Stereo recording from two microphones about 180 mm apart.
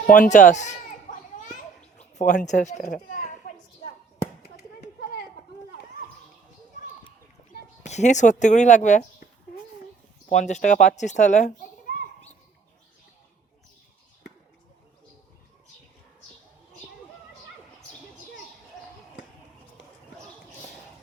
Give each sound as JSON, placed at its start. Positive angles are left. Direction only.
{"t": 0.1, "sound": "speech", "side_deg": 45}
{"t": 1.5, "sound": "children playing", "side_deg": 40}
{"t": 2.8, "sound": "a sound", "side_deg": 50}
{"t": 7.9, "sound": "speech", "side_deg": 40}
{"t": 10.2, "sound": "a child's voice", "side_deg": 40}